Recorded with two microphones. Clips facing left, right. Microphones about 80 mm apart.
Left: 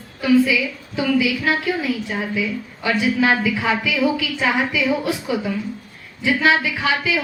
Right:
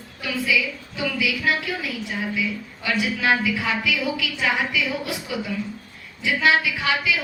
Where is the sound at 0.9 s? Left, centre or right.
Left.